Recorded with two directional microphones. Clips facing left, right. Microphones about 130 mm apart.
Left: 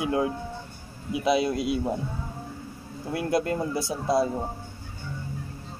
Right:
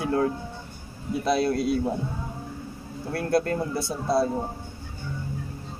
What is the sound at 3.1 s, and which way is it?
Speech, 10° left (ahead or behind).